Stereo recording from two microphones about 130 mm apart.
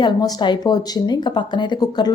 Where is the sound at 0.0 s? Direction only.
35° left (ahead or behind).